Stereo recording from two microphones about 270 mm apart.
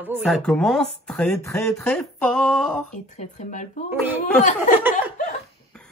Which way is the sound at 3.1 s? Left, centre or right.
Left.